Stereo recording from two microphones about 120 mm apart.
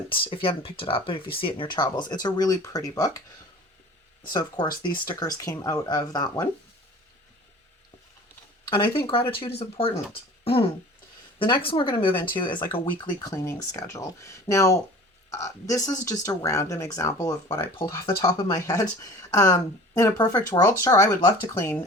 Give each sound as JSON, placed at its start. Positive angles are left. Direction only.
{"t": 0.1, "sound": "speech", "side_deg": 45}
{"t": 4.3, "sound": "speech", "side_deg": 35}
{"t": 8.7, "sound": "speech", "side_deg": 45}
{"t": 13.1, "sound": "speech", "side_deg": 30}